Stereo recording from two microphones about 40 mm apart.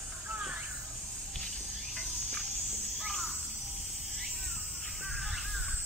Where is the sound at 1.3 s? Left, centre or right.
Centre.